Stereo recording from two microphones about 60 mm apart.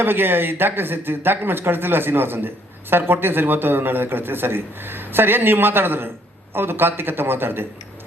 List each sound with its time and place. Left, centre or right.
0.0 s a man's voice: right